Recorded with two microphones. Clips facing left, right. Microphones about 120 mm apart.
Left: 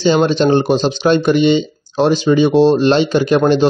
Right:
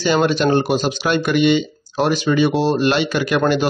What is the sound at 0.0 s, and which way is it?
Speech, 20° left (ahead or behind).